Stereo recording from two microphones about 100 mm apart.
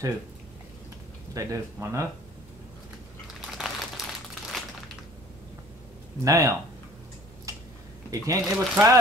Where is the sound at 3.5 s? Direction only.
Centre (ahead or behind).